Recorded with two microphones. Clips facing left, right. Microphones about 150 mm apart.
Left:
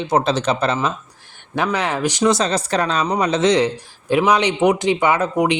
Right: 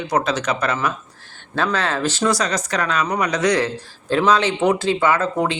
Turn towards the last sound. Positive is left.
turn(degrees=15)  # may be behind; listen again after turning